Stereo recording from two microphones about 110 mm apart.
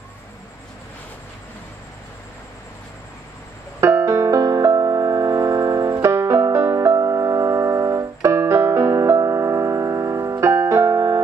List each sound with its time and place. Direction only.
3.8 s music: 25° right (ahead or behind)
5.9 s music: 25° right (ahead or behind)